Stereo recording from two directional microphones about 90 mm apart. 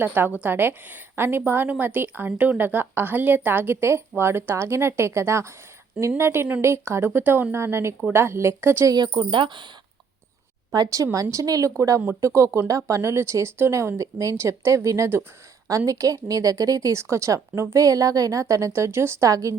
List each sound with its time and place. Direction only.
0.0 s a woman's voice: 20° right (ahead or behind)
8.9 s speech: 50° right (ahead or behind)
9.3 s speech: 65° right (ahead or behind)
10.7 s speech: 40° right (ahead or behind)